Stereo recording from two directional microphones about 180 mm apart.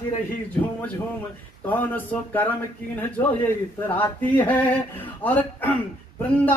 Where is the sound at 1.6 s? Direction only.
10° left (ahead or behind).